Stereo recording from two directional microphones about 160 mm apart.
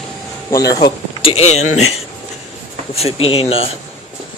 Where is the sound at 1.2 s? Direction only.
40° left (ahead or behind).